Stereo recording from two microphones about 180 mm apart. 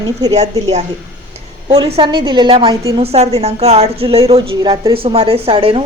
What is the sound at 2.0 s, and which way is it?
A woman's voice, 25° right (ahead or behind).